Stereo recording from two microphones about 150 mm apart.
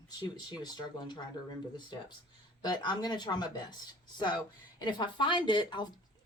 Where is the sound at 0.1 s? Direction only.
25° left (ahead or behind).